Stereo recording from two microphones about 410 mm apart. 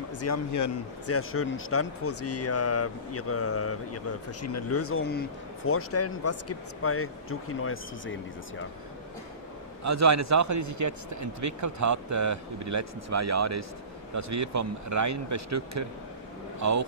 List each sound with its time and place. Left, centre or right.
0.2 s speech: left
9.8 s a man's voice: right